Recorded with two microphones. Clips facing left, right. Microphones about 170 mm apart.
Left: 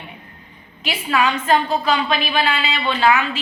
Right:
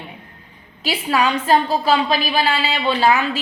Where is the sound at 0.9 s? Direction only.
35° right (ahead or behind).